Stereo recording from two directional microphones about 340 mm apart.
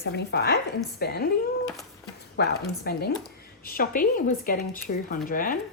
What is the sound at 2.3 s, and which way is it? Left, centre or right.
Speech, left.